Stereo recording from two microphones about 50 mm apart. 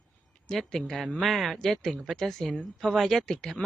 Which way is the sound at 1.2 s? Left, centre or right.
Centre.